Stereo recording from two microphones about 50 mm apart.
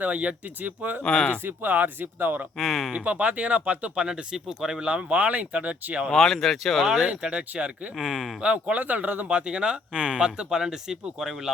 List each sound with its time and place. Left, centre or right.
0.0 s speech: right
1.0 s speech: centre
1.5 s speech: right
2.6 s speech: centre
2.9 s speech: right; by 4.8 s centre
4.8 s speech: right
6.1 s speech: centre
6.8 s speech: centre
7.1 s speech: right
7.9 s speech: centre
8.7 s speech: right
9.5 s speech: centre